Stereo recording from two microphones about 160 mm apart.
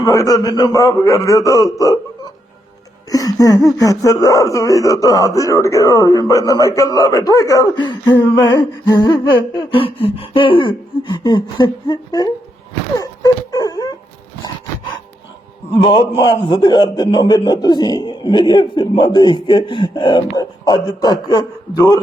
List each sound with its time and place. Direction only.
0.0 s a man's voice: 20° left (ahead or behind)
13.0 s wail: 25° left (ahead or behind)
15.8 s a man's voice: 30° left (ahead or behind)